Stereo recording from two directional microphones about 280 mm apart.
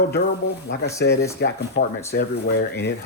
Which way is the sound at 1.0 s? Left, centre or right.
Left.